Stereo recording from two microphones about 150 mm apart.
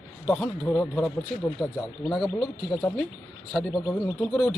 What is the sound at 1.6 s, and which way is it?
Speech, 5° right (ahead or behind).